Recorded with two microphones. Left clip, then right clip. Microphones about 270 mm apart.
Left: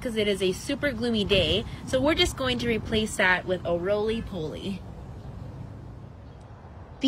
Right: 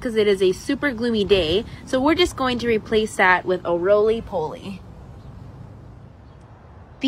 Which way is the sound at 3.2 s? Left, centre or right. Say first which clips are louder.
Right 6 dB; centre.